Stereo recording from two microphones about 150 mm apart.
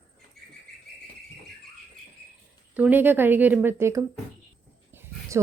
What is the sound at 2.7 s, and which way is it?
A woman's voice, 10° right (ahead or behind).